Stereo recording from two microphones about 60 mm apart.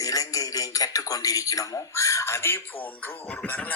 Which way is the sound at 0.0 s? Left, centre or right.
Left.